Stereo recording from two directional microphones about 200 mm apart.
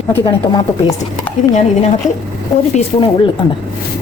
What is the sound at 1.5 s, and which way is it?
Speech, 35° left (ahead or behind).